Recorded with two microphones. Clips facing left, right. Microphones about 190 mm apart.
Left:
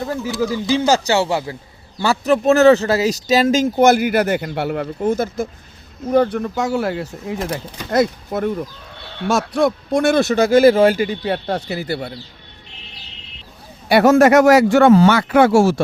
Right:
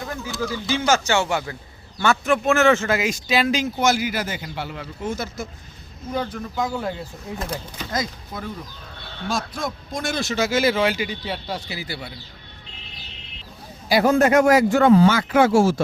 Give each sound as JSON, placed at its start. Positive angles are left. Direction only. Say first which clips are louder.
{"t": 0.1, "sound": "a man's voice", "louder": "left 6 dB", "side_deg": 30}
{"t": 6.1, "sound": "speech", "louder": "left 11 dB", "side_deg": 65}
{"t": 13.8, "sound": "speech", "louder": "left 6 dB", "side_deg": 70}